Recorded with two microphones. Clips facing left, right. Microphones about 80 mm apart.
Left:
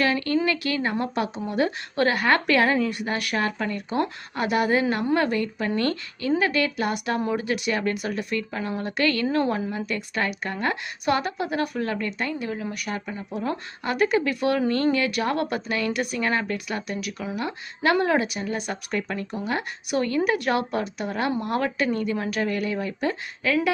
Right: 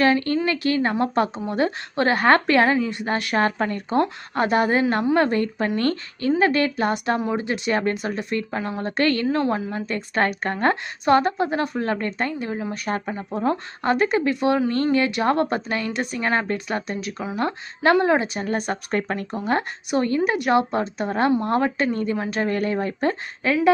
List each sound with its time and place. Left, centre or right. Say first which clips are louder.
0.0 s a woman's voice: right 3 dB; right
18.4 s speech: right 4 dB; right
19.9 s a woman's voice: right 2 dB; right